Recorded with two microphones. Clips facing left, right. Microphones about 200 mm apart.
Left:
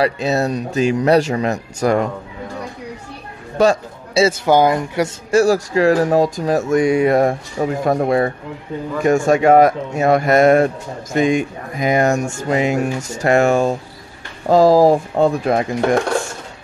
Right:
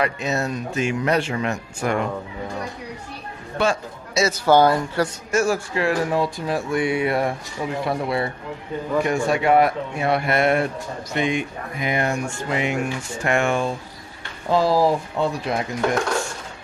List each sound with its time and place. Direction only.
0.0 s speech: 35° left (ahead or behind)
3.5 s a man's voice: 40° left (ahead or behind)
4.5 s speech: 15° left (ahead or behind)
5.3 s speech: 35° left (ahead or behind); by 16.0 s 50° left (ahead or behind)